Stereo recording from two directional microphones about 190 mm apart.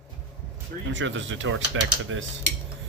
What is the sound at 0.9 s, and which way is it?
Speech, 80° right.